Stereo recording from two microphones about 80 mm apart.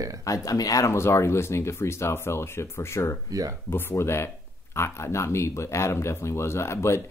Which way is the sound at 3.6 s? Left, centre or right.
Left.